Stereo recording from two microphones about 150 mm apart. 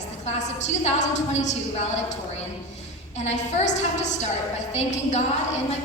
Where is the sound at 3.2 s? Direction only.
50° left (ahead or behind).